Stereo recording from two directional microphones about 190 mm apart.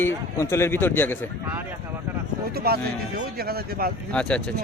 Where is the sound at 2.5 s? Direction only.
55° right (ahead or behind).